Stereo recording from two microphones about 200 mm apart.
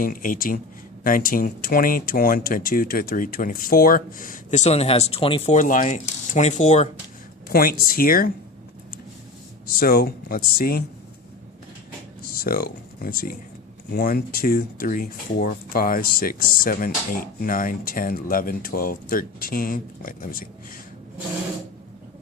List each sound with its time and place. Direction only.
0.0 s speech: 45° left (ahead or behind); by 5.5 s 30° left (ahead or behind)
5.5 s speech: 40° left (ahead or behind)
7.5 s speech: 50° left (ahead or behind)
9.6 s speech: 50° left (ahead or behind)
12.3 s speech: 50° left (ahead or behind)